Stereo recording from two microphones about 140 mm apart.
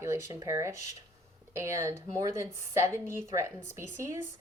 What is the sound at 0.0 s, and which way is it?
Speech, 20° right (ahead or behind).